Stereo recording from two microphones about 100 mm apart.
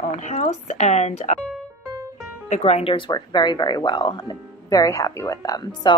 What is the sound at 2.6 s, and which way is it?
Speech, 85° left.